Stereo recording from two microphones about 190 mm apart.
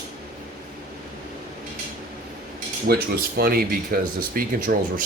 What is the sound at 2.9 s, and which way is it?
Speech, 55° right (ahead or behind).